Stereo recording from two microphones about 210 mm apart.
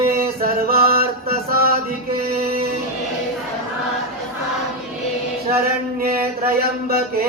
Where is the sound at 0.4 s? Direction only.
45° right (ahead or behind).